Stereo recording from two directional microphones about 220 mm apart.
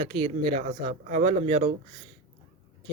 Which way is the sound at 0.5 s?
30° right (ahead or behind).